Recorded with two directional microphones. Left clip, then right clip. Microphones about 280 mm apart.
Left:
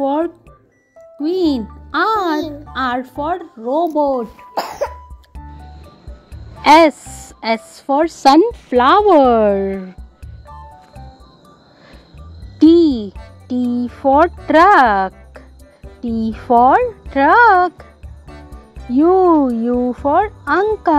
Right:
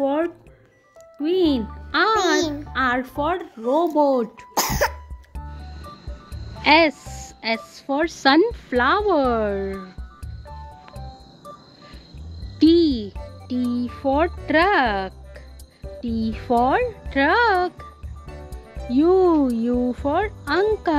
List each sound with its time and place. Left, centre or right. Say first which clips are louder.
0.0 s music: left 4 dB; centre
1.2 s a woman's voice: left 3 dB; centre
4.6 s cough: even; right
6.6 s speech: left 7 dB; centre
12.5 s music: left 6 dB; centre
13.7 s speech: left 9 dB; centre
18.3 s music: left 2 dB; centre
18.9 s speech: left 5 dB; centre